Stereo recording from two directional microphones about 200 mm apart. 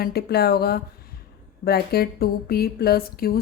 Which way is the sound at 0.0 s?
50° left (ahead or behind).